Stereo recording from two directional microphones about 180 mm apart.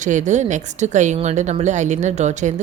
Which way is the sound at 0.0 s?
45° right (ahead or behind).